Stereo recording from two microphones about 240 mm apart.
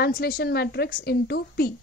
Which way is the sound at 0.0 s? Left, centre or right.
Left.